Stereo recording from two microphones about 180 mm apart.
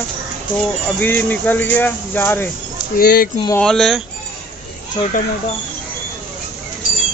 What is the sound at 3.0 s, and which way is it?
Speech, 55° left (ahead or behind).